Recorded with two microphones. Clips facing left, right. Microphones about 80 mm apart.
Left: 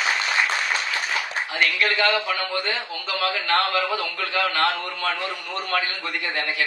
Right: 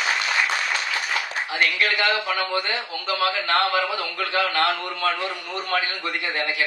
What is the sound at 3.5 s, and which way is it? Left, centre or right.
Speech, right.